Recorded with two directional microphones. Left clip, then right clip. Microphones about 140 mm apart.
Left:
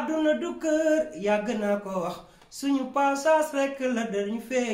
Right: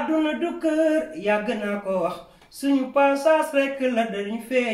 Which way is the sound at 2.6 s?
40° left (ahead or behind).